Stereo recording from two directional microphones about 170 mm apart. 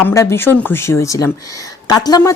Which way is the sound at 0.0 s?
15° left (ahead or behind).